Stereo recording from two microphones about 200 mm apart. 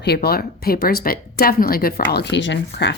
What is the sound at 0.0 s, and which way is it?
Speech, 50° left (ahead or behind).